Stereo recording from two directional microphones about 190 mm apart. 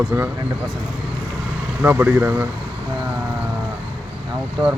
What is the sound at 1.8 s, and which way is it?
Speech, 10° right (ahead or behind).